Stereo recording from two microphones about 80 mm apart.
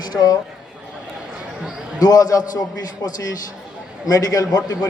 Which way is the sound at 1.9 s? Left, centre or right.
Left.